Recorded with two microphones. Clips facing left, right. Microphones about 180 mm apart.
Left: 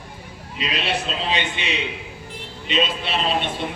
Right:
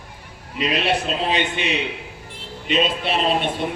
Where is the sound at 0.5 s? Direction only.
50° right (ahead or behind).